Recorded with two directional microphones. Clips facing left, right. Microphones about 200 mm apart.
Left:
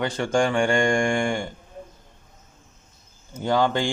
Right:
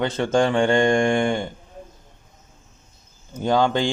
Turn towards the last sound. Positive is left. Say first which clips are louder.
# right 2 dB
turn(degrees=-20)  # may be behind; listen again after turning